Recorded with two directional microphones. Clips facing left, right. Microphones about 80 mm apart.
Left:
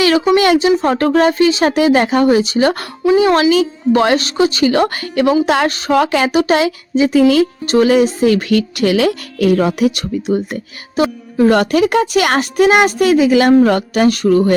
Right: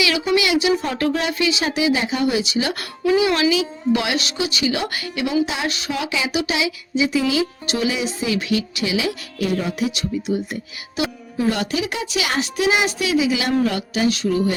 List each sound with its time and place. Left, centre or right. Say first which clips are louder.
0.0 s speech: left 8 dB; left
5.5 s speech: left 11 dB; left
5.7 s speech: left 11 dB; left
11.4 s speech: left 11 dB; left